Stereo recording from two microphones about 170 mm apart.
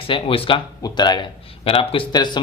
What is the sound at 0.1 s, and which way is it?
A man's voice, 30° left (ahead or behind).